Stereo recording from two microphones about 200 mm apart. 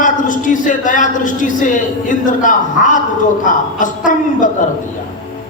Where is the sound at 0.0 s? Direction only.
40° left (ahead or behind).